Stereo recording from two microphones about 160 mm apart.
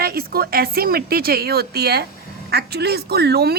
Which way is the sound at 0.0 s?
70° right (ahead or behind).